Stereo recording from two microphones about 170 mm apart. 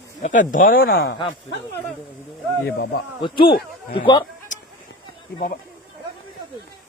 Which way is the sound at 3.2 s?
30° left (ahead or behind).